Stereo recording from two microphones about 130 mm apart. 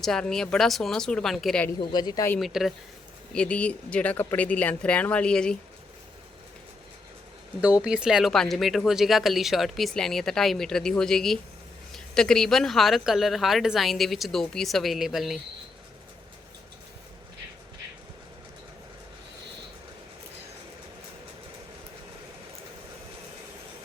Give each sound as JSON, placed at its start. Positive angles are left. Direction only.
{"t": 0.0, "sound": "speech", "side_deg": 5}
{"t": 1.8, "sound": "speech", "side_deg": 30}
{"t": 2.4, "sound": "speech", "side_deg": 0}
{"t": 3.3, "sound": "speech", "side_deg": 10}
{"t": 7.8, "sound": "speech", "side_deg": -5}